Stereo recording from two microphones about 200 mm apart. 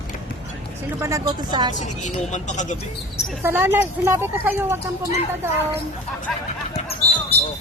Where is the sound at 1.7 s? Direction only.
35° left (ahead or behind).